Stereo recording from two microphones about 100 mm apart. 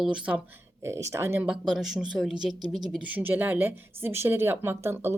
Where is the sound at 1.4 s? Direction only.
5° right (ahead or behind).